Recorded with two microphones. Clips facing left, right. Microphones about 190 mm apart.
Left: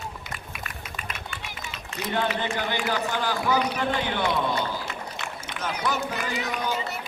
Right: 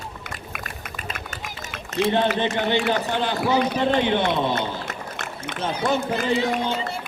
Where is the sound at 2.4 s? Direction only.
25° right (ahead or behind).